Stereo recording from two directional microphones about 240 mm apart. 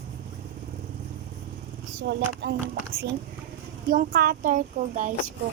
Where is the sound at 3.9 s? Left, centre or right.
Right.